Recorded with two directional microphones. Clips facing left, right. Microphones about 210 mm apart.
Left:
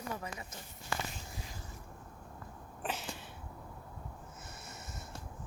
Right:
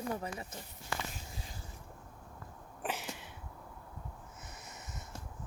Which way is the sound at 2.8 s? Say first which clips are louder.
Right 1 dB; 15° right (ahead or behind).